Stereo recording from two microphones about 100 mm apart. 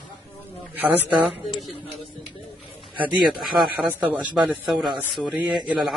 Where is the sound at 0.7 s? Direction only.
15° right (ahead or behind).